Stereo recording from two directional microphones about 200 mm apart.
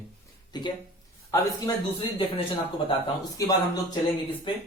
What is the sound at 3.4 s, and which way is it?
Speech, 15° left (ahead or behind).